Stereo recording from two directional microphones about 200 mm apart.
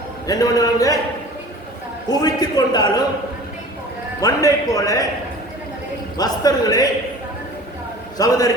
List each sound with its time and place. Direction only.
0.3 s a man's voice: 20° left (ahead or behind)
2.0 s a man's voice: 20° left (ahead or behind)
4.2 s a man's voice: 15° left (ahead or behind)
6.1 s a man's voice: 20° left (ahead or behind)
8.2 s a man's voice: 20° left (ahead or behind)